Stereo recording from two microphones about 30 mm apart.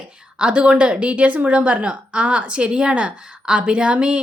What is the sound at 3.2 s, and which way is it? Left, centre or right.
Speech, right.